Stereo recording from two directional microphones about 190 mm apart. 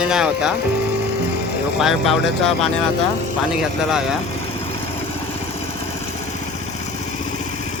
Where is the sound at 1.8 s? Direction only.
Centre (ahead or behind).